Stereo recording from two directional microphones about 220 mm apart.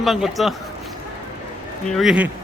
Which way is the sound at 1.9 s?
5° right (ahead or behind).